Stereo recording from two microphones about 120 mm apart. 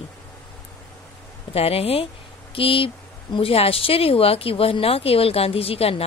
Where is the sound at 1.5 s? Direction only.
55° left (ahead or behind).